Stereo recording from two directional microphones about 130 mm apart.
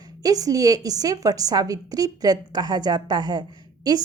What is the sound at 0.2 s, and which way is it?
A woman's voice, 30° right (ahead or behind).